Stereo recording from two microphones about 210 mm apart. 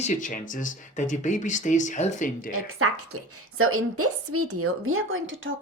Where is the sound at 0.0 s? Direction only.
35° left (ahead or behind).